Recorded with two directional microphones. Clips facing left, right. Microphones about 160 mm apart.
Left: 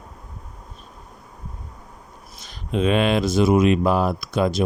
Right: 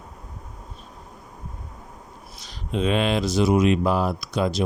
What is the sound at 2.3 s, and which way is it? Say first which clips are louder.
Speech: left 3 dB; 55° left (ahead or behind).